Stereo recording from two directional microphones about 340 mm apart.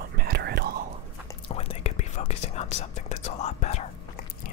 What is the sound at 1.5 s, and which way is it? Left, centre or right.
Whispering, centre.